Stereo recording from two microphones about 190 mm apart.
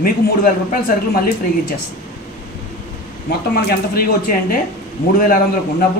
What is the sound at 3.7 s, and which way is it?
Speech, 50° left (ahead or behind).